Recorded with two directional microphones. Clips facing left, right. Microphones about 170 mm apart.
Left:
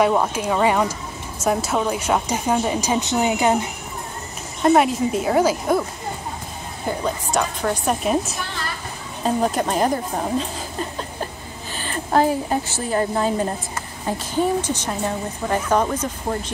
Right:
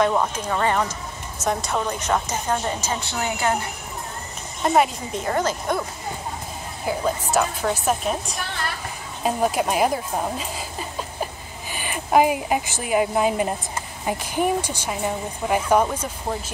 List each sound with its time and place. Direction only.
0.0 s a woman's voice: 10° left (ahead or behind)
4.6 s a woman's voice: centre (ahead or behind)
6.9 s a woman's voice: 5° right (ahead or behind)
9.2 s a woman's voice: 10° right (ahead or behind)